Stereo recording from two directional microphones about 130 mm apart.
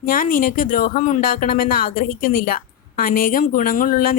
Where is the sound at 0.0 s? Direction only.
90° left.